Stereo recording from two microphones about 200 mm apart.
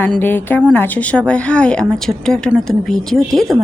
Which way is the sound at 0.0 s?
10° left (ahead or behind).